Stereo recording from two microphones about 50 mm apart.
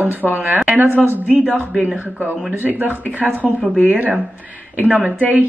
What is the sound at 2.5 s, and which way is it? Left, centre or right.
Speech, right.